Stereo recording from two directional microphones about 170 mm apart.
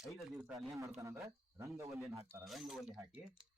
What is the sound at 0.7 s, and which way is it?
A man's voice, 20° right (ahead or behind).